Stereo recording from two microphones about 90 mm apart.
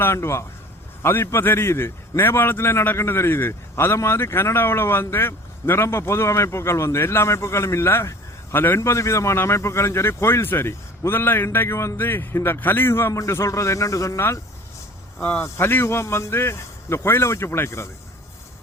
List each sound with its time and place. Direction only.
0.0 s a man's voice: 30° left (ahead or behind)
15.2 s a man's voice: 20° left (ahead or behind)